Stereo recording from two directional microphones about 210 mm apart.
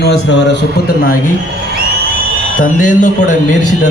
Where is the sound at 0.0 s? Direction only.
55° left (ahead or behind).